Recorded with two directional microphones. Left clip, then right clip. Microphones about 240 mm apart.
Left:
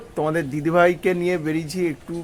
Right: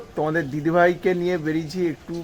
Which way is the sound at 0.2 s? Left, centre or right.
Centre.